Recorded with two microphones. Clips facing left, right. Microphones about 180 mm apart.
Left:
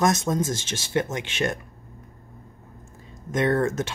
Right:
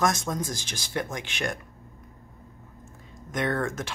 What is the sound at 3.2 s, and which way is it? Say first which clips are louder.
Speech: left 6 dB; 25° left (ahead or behind).